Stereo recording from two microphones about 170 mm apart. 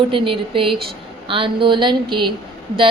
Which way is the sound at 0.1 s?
30° right (ahead or behind).